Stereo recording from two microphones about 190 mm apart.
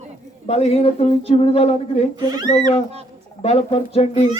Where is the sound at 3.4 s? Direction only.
35° left (ahead or behind).